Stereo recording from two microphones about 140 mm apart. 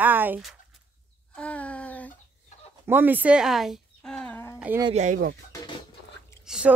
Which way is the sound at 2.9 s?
15° right (ahead or behind).